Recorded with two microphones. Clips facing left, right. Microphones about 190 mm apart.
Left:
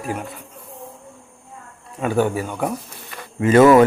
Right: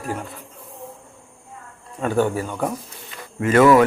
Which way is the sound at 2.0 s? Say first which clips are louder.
Left 1 dB; 10° left (ahead or behind).